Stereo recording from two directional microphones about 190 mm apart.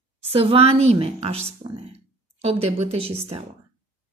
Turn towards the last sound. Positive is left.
turn(degrees=-30)  # may be behind; listen again after turning